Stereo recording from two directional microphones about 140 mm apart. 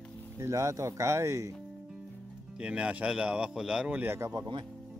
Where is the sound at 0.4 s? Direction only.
20° right (ahead or behind).